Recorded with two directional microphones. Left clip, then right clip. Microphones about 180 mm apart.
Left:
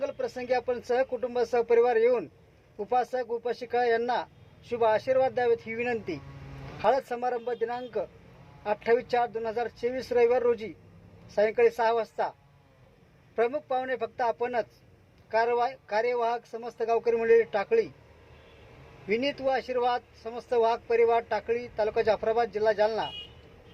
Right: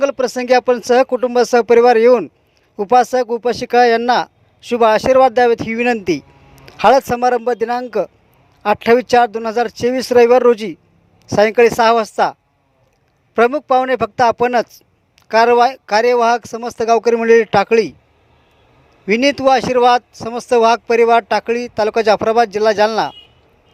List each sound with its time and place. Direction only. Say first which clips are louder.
0.0 s speech: right 16 dB; 45° right (ahead or behind)
19.0 s speech: right 15 dB; 45° right (ahead or behind)